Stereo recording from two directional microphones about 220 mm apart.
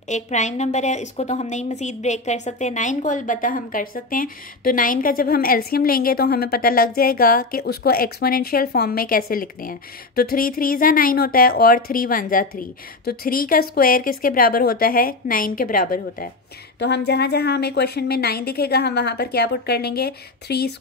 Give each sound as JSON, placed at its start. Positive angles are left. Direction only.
{"t": 0.1, "sound": "a woman's voice", "side_deg": 30}